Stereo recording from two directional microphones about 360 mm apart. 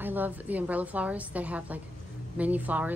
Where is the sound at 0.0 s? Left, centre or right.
Centre.